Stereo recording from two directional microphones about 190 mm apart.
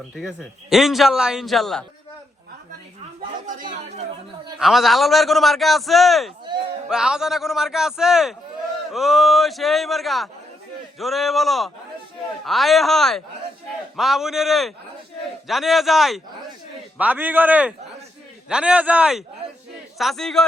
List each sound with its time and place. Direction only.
0.2 s a man's voice: 5° left (ahead or behind)
3.4 s speech: 45° right (ahead or behind)
4.6 s a man's voice: centre (ahead or behind)